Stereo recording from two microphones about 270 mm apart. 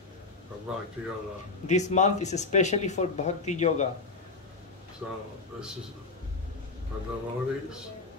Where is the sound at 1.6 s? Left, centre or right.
Left.